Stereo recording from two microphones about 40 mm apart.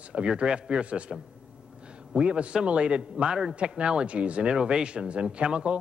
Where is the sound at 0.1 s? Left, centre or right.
Right.